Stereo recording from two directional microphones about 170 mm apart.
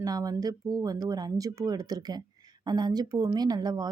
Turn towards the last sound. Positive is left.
turn(degrees=-25)  # may be behind; listen again after turning